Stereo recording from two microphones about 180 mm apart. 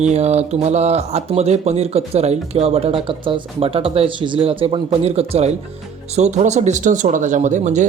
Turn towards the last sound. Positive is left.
turn(degrees=-40)  # may be behind; listen again after turning